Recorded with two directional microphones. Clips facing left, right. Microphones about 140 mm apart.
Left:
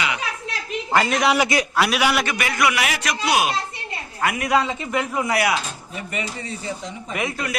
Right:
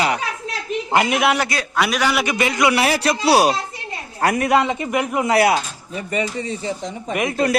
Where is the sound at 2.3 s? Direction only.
20° right (ahead or behind).